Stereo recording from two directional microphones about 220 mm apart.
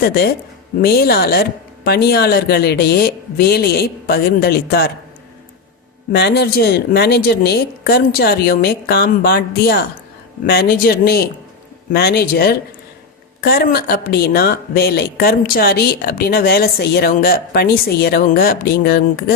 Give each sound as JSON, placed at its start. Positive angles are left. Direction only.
{"t": 0.0, "sound": "speech", "side_deg": 45}
{"t": 6.1, "sound": "speech", "side_deg": 50}